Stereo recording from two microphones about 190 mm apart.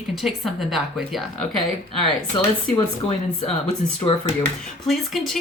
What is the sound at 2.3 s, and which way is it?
Speech, 25° left (ahead or behind).